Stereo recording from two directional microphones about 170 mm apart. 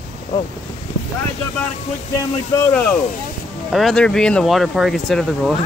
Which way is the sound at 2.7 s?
5° left (ahead or behind).